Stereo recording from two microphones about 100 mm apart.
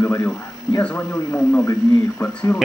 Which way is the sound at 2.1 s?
15° left (ahead or behind).